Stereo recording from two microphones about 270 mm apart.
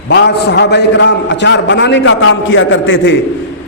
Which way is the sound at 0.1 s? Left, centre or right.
Left.